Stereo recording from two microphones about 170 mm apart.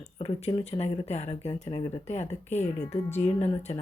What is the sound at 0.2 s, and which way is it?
Speech, 35° left (ahead or behind).